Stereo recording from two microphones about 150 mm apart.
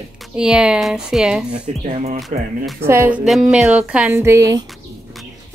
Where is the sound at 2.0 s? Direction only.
50° right (ahead or behind).